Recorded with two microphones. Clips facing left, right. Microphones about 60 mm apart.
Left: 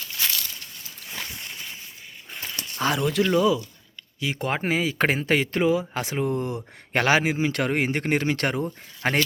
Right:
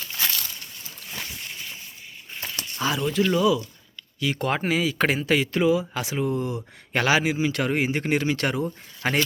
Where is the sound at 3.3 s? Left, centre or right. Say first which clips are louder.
Left 1 dB; left.